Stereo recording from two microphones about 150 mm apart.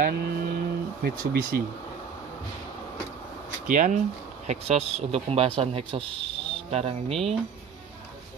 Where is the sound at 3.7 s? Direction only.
55° right (ahead or behind); by 7.3 s 40° right (ahead or behind).